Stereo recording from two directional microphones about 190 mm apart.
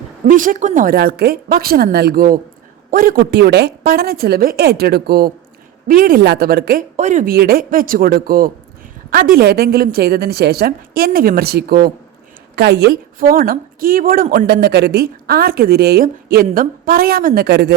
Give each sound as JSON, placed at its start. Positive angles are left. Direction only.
{"t": 0.3, "sound": "a woman's voice", "side_deg": -45}
{"t": 6.9, "sound": "a woman's voice", "side_deg": -40}